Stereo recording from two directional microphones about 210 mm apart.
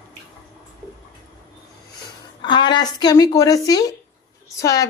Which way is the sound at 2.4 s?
20° left (ahead or behind).